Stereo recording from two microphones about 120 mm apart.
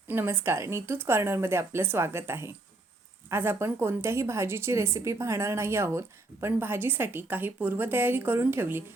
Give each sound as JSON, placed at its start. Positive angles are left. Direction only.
{"t": 0.1, "sound": "a woman's voice", "side_deg": -20}